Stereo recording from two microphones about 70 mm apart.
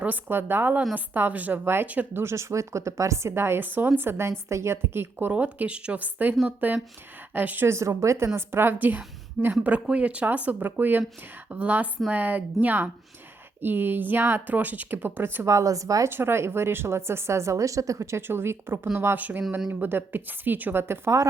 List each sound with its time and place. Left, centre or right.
0.0 s speech: right
1.6 s speech: right
1.9 s speech: right
2.2 s speech: right
5.3 s speech: centre
7.7 s speech: right
8.4 s speech: right
15.4 s speech: right
16.0 s speech: right